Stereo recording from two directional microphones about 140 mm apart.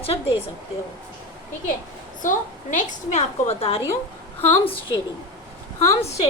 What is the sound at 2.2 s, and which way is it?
A woman's voice, 65° left (ahead or behind).